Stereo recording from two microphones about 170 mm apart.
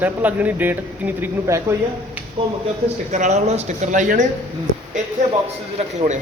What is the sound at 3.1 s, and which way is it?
Speech, 40° right (ahead or behind).